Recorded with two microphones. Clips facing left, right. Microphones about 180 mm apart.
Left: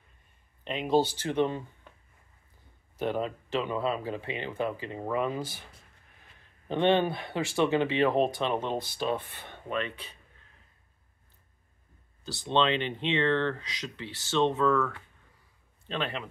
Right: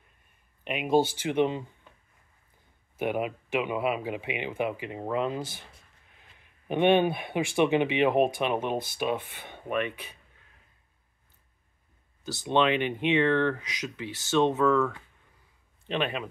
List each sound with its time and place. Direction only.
0.7 s speech: 10° right (ahead or behind)
3.0 s speech: 10° right (ahead or behind)
6.4 s speech: 15° right (ahead or behind)
12.3 s speech: 15° right (ahead or behind)